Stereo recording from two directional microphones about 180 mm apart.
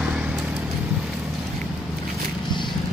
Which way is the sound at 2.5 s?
25° left (ahead or behind).